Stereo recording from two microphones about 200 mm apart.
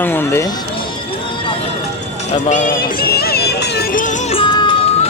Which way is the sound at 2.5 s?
40° left (ahead or behind).